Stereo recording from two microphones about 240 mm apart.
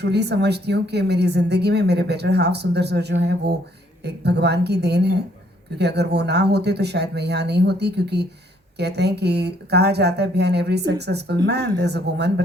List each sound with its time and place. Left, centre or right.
0.0 s speech: right